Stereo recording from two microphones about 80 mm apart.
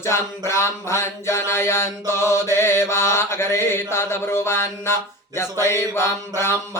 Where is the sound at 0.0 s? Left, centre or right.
Left.